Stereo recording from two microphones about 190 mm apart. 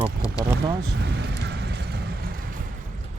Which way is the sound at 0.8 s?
65° right (ahead or behind).